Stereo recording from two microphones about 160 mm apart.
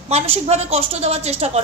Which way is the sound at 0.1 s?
40° right (ahead or behind).